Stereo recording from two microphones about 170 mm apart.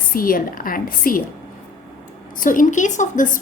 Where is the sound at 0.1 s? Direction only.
55° left (ahead or behind).